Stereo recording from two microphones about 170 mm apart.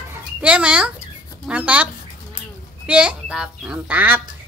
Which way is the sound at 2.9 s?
5° right (ahead or behind).